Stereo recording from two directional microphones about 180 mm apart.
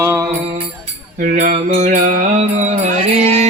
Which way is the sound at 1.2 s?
45° right (ahead or behind).